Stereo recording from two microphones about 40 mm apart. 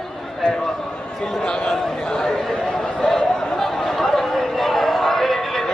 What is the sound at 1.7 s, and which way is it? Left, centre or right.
A man's voice, centre.